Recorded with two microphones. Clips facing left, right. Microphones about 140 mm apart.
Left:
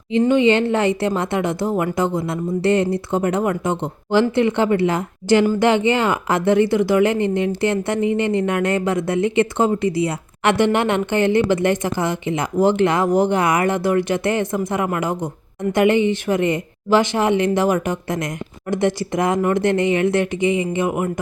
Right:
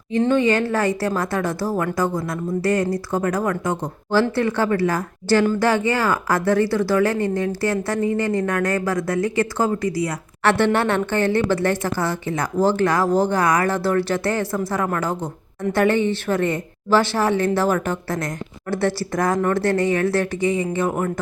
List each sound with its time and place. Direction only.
0.1 s a woman's voice: 15° left (ahead or behind)